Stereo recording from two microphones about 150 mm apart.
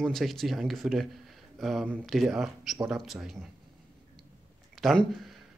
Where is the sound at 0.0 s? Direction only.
Centre (ahead or behind).